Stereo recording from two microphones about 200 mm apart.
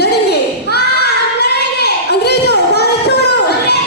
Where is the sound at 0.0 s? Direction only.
55° left (ahead or behind).